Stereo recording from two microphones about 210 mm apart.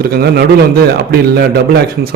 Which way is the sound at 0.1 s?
45° right (ahead or behind).